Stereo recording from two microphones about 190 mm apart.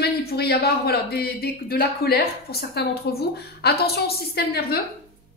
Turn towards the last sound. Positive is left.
turn(degrees=55)  # may be behind; listen again after turning